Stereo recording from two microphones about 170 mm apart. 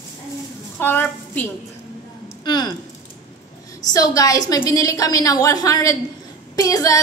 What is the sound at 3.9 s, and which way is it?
A woman's voice, 20° left (ahead or behind).